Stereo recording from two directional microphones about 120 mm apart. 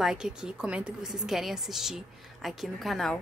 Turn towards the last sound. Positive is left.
turn(degrees=0)  # may be behind; listen again after turning